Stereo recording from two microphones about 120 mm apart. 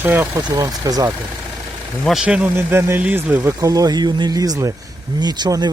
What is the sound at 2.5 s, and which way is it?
Speech, 20° right (ahead or behind).